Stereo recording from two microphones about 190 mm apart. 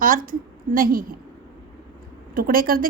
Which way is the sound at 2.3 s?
50° right (ahead or behind).